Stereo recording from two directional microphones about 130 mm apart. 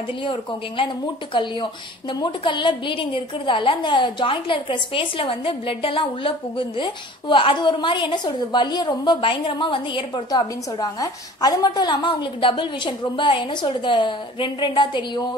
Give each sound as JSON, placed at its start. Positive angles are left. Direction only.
{"t": 0.2, "sound": "speech", "side_deg": 40}